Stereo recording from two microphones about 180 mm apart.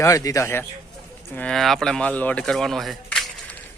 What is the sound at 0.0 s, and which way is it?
Speech, 20° left (ahead or behind).